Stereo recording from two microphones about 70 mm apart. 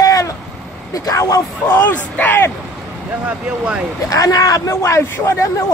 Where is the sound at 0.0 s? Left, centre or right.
Left.